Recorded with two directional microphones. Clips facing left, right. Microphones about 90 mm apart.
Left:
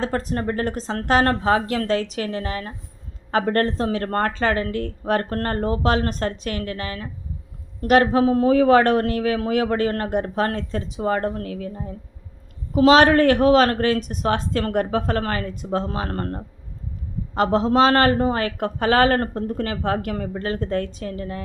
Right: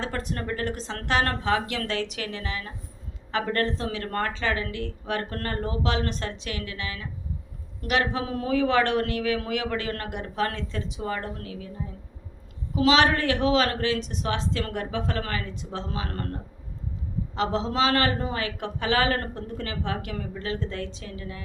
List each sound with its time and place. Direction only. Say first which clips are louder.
0.0 s a man's voice: left 7 dB; 35° left (ahead or behind)
12.7 s speech: left 7 dB; 40° left (ahead or behind)